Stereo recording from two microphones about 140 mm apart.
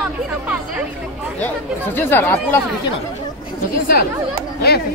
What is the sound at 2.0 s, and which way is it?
Speech, 15° left (ahead or behind).